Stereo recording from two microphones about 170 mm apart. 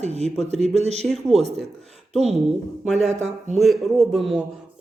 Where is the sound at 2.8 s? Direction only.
Centre (ahead or behind).